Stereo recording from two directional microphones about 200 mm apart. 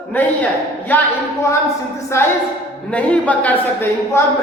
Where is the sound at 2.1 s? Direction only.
15° left (ahead or behind).